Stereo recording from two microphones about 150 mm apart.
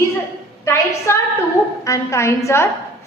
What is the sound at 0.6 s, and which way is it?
A woman's voice, 20° left (ahead or behind).